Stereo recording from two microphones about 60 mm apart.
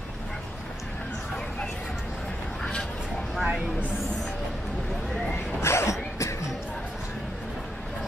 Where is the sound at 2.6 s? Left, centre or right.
Centre.